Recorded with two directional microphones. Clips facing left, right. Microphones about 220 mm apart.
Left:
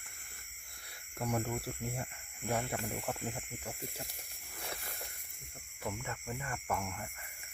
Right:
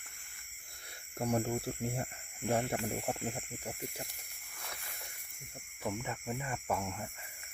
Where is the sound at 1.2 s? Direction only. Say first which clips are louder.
Right 3 dB; 30° right (ahead or behind).